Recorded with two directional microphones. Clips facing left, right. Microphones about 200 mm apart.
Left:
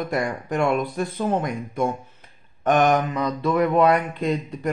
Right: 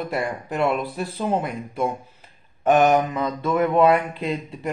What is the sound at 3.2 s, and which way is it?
Speech, 5° right (ahead or behind).